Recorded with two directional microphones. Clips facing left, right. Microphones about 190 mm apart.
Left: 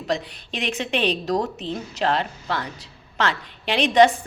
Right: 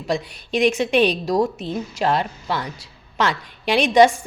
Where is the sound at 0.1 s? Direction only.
10° right (ahead or behind).